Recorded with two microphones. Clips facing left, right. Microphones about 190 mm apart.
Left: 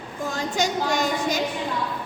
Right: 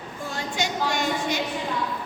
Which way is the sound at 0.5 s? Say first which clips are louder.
Left 3 dB; 40° left (ahead or behind).